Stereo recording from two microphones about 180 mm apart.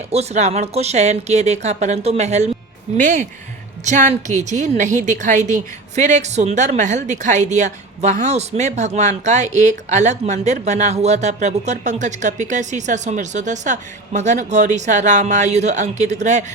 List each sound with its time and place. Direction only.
0.1 s a woman's voice: 35° right (ahead or behind)